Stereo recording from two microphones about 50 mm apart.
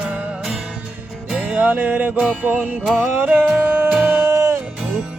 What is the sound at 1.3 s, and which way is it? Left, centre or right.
Music, right.